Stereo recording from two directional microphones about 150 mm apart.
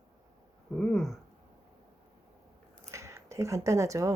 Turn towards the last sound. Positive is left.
turn(degrees=-20)  # may be behind; listen again after turning